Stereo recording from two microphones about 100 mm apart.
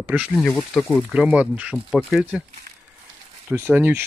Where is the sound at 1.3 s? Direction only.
10° right (ahead or behind).